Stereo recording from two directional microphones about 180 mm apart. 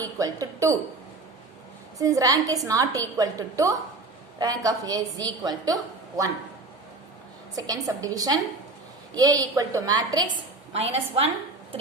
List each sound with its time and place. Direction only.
0.0 s a woman's voice: 20° right (ahead or behind)
2.0 s a woman's voice: 20° right (ahead or behind)
7.5 s a woman's voice: 20° right (ahead or behind)
10.7 s a woman's voice: 35° right (ahead or behind)